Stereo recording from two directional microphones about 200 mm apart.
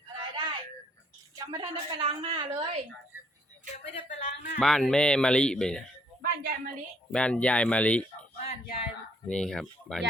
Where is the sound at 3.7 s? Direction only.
35° left (ahead or behind).